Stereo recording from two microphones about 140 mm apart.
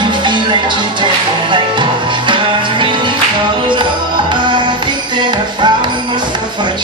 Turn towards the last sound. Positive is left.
turn(degrees=-35)  # may be behind; listen again after turning